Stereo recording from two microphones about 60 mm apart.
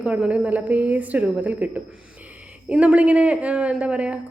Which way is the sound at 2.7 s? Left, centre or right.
Centre.